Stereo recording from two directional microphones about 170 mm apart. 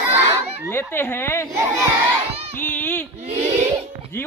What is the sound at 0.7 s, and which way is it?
Speech, 15° left (ahead or behind).